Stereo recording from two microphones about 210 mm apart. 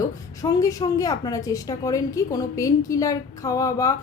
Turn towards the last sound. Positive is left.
turn(degrees=15)  # may be behind; listen again after turning